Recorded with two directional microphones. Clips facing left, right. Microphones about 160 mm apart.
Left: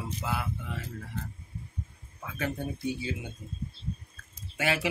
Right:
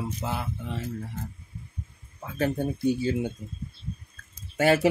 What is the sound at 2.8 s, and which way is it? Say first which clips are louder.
Speech: right 10 dB; 45° right (ahead or behind).